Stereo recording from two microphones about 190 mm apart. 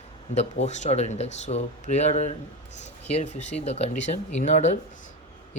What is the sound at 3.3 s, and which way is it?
Speech, 35° left (ahead or behind).